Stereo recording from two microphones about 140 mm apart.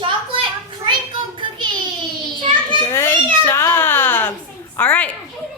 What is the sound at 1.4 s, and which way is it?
Child singing, 35° right (ahead or behind).